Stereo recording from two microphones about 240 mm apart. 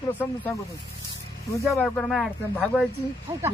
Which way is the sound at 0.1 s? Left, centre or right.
Centre.